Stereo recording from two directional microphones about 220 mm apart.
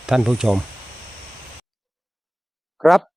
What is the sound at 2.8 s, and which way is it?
Speech, centre (ahead or behind).